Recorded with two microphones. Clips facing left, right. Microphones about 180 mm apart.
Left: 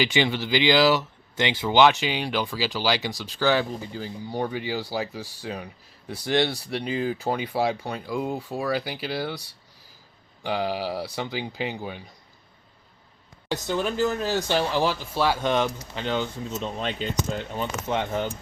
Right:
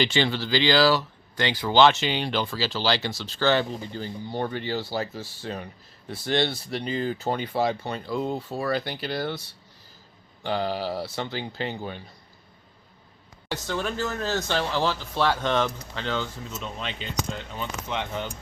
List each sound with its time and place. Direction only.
0.0 s speech: 15° left (ahead or behind)
10.4 s speech: 10° left (ahead or behind)
13.5 s speech: 15° left (ahead or behind)
16.6 s speech: 35° left (ahead or behind)